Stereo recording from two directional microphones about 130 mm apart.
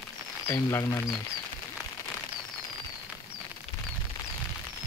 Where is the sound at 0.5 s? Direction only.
25° left (ahead or behind).